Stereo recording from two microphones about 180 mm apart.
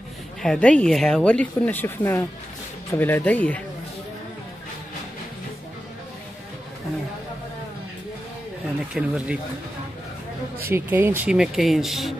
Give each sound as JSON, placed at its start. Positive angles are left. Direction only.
{"t": 0.4, "sound": "speech", "side_deg": 5}
{"t": 8.7, "sound": "speech", "side_deg": -5}
{"t": 10.7, "sound": "speech", "side_deg": -10}